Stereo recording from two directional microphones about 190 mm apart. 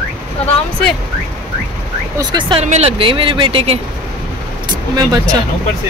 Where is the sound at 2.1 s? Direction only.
25° right (ahead or behind).